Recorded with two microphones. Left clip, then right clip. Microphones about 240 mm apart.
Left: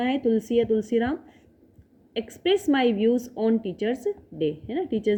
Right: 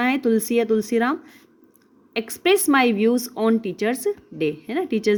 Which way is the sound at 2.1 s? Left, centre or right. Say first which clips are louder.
Right 5 dB; right.